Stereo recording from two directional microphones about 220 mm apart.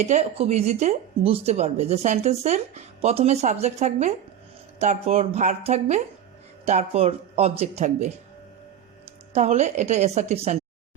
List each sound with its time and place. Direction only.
0.0 s a woman's voice: 30° right (ahead or behind)
9.3 s a woman's voice: 30° right (ahead or behind)